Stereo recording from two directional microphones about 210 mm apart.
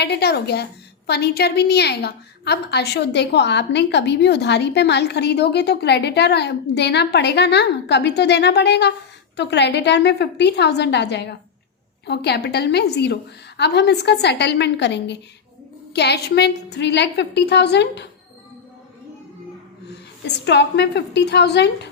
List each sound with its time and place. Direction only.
0.0 s a woman's voice: 50° left (ahead or behind)
19.9 s a woman's voice: 55° left (ahead or behind)